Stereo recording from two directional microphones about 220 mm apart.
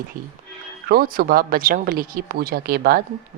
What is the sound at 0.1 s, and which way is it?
Speech, 40° right (ahead or behind).